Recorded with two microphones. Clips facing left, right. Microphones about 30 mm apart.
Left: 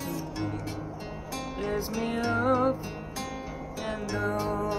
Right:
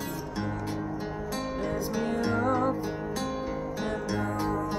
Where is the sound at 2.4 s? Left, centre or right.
Left.